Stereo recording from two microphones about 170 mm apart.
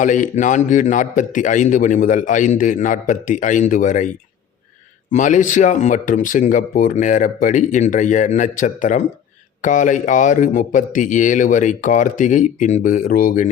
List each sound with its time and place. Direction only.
0.0 s a man's voice: 50° left (ahead or behind)
5.1 s a man's voice: 45° left (ahead or behind)